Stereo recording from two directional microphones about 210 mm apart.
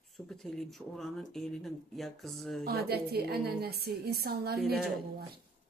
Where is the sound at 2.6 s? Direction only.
50° right (ahead or behind).